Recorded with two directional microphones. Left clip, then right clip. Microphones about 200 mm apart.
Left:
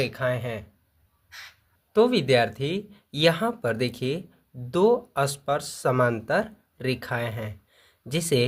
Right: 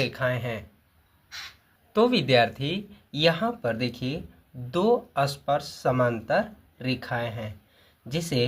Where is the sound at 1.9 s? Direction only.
20° left (ahead or behind).